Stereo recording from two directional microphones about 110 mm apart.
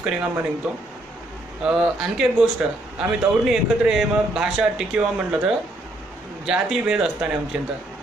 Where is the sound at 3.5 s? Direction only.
5° right (ahead or behind).